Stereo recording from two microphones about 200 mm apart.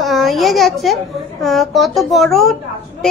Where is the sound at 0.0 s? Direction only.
Centre (ahead or behind).